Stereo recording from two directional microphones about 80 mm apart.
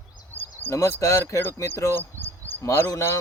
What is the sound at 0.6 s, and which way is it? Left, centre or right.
Speech, left.